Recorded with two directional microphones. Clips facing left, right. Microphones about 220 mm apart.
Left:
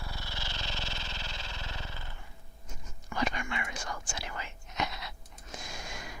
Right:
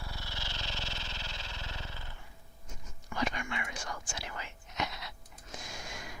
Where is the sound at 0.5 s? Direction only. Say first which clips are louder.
Left 2 dB; 90° left.